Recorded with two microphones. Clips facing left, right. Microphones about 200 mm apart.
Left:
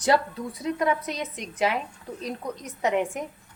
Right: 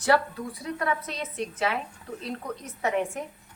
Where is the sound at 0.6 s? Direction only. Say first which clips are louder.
Left 5 dB; 20° left (ahead or behind).